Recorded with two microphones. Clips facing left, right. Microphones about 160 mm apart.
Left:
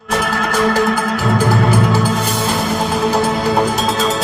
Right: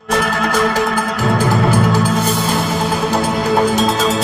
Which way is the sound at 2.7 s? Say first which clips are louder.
Left 1 dB; centre (ahead or behind).